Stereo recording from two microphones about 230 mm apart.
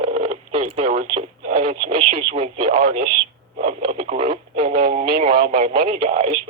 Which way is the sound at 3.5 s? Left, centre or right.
Right.